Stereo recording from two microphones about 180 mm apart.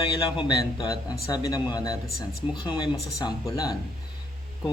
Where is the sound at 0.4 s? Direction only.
20° left (ahead or behind).